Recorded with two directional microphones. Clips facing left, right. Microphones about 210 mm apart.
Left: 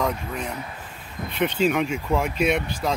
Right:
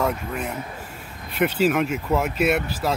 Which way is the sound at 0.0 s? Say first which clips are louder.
Right 2 dB; 5° right (ahead or behind).